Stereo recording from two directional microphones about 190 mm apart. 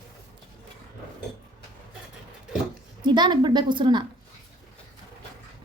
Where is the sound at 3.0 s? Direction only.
25° right (ahead or behind).